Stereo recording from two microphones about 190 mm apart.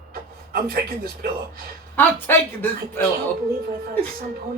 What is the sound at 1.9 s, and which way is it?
Speech, 10° left (ahead or behind).